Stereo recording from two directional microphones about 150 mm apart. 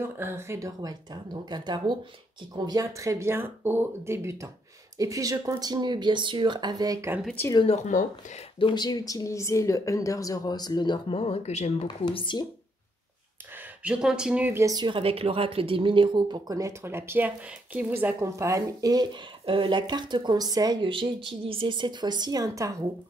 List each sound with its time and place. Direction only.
0.0 s speech: 15° right (ahead or behind)
7.6 s speech: 50° left (ahead or behind)
8.5 s speech: 30° left (ahead or behind)
12.0 s speech: 35° left (ahead or behind)
13.8 s speech: 5° right (ahead or behind); by 22.8 s 20° right (ahead or behind)